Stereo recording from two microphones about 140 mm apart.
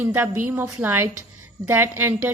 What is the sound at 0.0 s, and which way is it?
A woman's voice, 15° right (ahead or behind).